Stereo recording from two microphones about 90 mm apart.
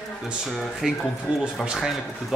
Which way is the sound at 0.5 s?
Centre (ahead or behind).